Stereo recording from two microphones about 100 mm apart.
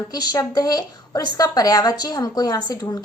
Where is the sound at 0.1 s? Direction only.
40° left (ahead or behind).